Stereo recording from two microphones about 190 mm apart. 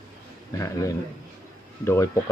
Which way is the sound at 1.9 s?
15° left (ahead or behind).